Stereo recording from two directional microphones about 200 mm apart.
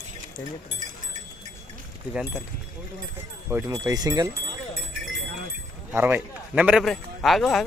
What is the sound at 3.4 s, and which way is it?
Speech, 15° right (ahead or behind).